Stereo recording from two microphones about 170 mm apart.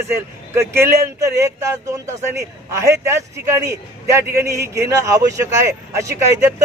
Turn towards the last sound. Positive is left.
turn(degrees=-15)  # may be behind; listen again after turning